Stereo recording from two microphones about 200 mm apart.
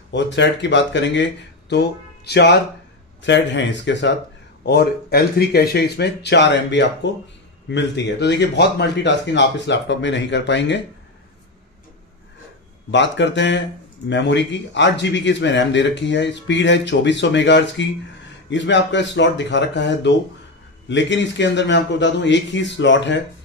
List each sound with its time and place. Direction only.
0.1 s speech: 60° left (ahead or behind)
12.9 s speech: 65° left (ahead or behind)